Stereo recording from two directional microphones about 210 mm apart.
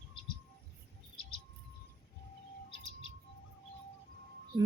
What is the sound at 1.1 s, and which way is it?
Bird, 25° left (ahead or behind).